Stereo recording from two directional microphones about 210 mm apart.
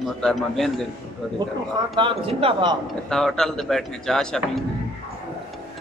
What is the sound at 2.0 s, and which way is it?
Speech, 25° right (ahead or behind).